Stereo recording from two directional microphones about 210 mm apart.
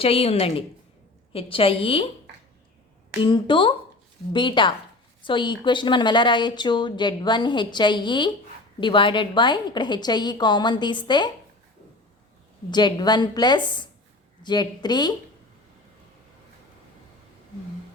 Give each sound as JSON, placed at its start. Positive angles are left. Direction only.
{"t": 0.0, "sound": "a woman's voice", "side_deg": 25}
{"t": 3.2, "sound": "a woman's voice", "side_deg": 20}
{"t": 12.7, "sound": "a woman's voice", "side_deg": 20}